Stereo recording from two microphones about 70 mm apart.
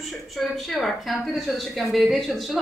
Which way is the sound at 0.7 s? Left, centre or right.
Centre.